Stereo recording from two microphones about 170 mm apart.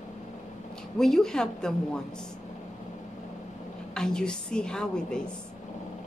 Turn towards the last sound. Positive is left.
turn(degrees=5)  # may be behind; listen again after turning